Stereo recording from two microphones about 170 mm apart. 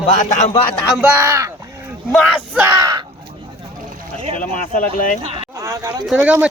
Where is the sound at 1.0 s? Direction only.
15° right (ahead or behind).